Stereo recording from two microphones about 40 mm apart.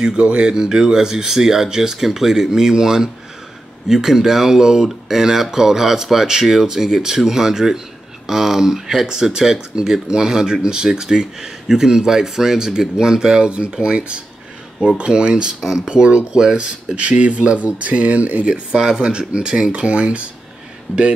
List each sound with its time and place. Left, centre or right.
0.0 s speech: right
15.6 s speech: centre
15.9 s speech: right